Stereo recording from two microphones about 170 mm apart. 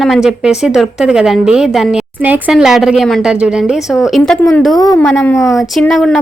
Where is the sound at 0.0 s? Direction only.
Centre (ahead or behind).